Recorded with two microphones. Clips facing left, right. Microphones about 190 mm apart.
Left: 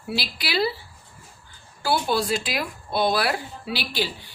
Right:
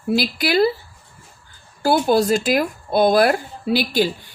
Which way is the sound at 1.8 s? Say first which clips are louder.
Right 7 dB; 45° right (ahead or behind).